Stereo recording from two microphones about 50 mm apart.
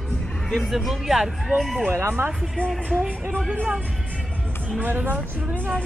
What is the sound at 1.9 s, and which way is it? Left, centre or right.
Speech, right.